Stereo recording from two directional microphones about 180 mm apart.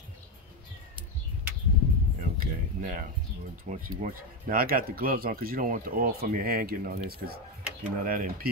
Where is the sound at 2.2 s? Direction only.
45° right (ahead or behind).